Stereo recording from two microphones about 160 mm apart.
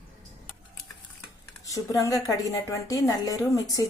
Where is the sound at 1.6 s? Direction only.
20° left (ahead or behind).